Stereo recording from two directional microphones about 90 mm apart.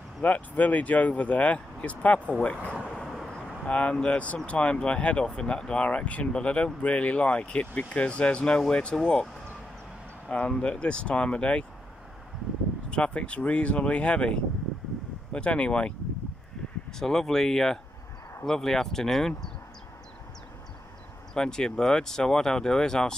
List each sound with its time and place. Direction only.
0.2 s speech: 20° left (ahead or behind)
12.9 s speech: 10° left (ahead or behind)
17.0 s speech: 5° left (ahead or behind)
21.3 s speech: 5° left (ahead or behind)